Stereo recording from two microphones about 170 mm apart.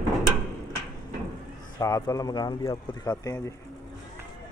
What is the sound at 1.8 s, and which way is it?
Speech, 20° left (ahead or behind).